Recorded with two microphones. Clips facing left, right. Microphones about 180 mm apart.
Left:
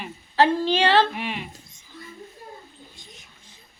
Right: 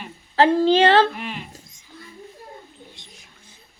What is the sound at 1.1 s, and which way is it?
Speech, 5° left (ahead or behind).